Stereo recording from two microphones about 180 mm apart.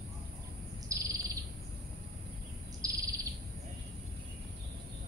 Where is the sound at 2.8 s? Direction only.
20° right (ahead or behind).